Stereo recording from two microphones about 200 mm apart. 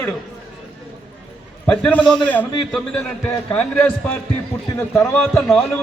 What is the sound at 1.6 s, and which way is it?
Speech, 5° left (ahead or behind).